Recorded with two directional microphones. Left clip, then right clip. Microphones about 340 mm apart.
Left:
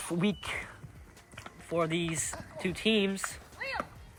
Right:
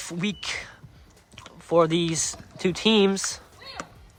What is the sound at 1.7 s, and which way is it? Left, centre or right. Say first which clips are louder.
Speech: right 10 dB; centre.